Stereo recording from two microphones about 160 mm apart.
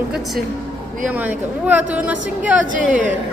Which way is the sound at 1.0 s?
10° right (ahead or behind).